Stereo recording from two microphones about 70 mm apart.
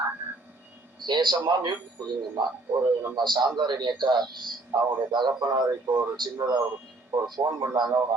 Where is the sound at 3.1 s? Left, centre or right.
Right.